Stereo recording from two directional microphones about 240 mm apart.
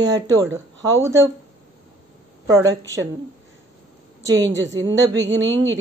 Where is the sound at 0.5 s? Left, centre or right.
Right.